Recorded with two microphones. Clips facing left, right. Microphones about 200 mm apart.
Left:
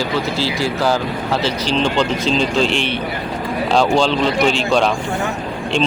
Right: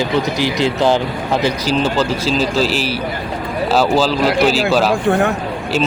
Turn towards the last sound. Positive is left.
turn(degrees=-5)  # may be behind; listen again after turning